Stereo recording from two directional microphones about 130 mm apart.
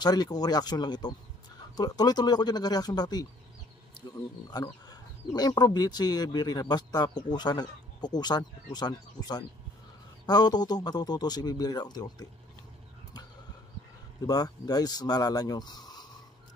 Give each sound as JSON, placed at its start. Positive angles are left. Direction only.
{"t": 0.0, "sound": "speech", "side_deg": 30}
{"t": 4.5, "sound": "speech", "side_deg": 30}
{"t": 14.2, "sound": "speech", "side_deg": 30}